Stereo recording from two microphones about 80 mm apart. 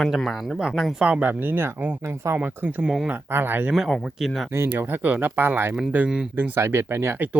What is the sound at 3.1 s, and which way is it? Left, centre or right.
Speech, right.